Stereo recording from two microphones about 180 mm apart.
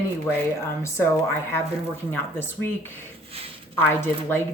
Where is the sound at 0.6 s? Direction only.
15° left (ahead or behind).